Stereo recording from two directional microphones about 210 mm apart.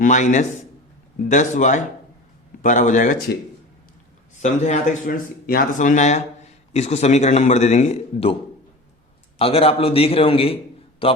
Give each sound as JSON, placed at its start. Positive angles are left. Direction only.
{"t": 0.0, "sound": "speech", "side_deg": 35}
{"t": 4.4, "sound": "speech", "side_deg": 35}
{"t": 9.4, "sound": "a man's voice", "side_deg": 25}